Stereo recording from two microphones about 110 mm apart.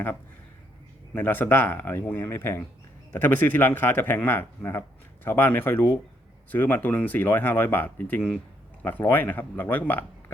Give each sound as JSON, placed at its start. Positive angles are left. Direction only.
{"t": 1.1, "sound": "speech", "side_deg": 15}